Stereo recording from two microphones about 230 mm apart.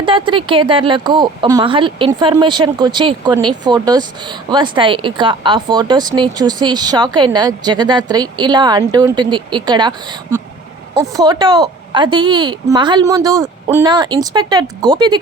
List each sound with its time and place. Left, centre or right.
0.0 s a woman's voice: right
10.9 s a woman's voice: centre